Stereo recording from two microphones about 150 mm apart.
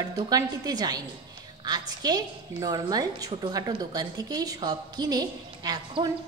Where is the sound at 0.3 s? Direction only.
25° right (ahead or behind).